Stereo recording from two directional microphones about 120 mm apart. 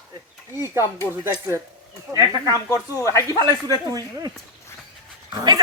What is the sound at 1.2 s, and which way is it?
Speech, 25° right (ahead or behind).